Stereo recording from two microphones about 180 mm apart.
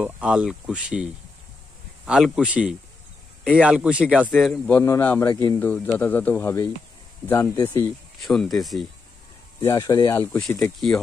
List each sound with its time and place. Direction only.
0.0 s speech: 5° right (ahead or behind)
2.0 s a man's voice: centre (ahead or behind)
9.6 s a man's voice: 20° left (ahead or behind)